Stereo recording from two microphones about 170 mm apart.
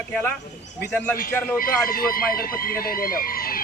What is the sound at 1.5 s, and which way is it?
A man's voice, 60° left (ahead or behind).